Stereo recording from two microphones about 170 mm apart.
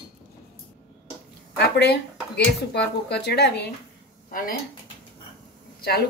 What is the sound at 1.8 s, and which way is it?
Speech, 80° left.